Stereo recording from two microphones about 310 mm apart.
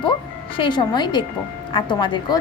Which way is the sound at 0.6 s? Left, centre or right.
Centre.